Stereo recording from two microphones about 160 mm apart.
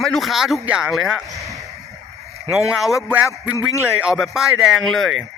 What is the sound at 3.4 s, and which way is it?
Speech, 20° left (ahead or behind).